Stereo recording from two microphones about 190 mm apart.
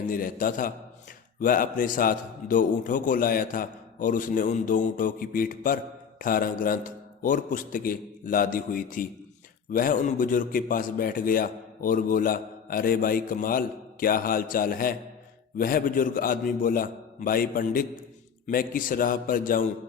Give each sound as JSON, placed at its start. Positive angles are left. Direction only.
{"t": 0.1, "sound": "a man's voice", "side_deg": 50}